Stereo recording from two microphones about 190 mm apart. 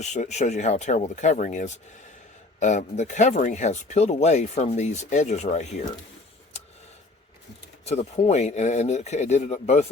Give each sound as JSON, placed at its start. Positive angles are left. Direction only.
{"t": 0.0, "sound": "speech", "side_deg": 40}
{"t": 7.9, "sound": "speech", "side_deg": 35}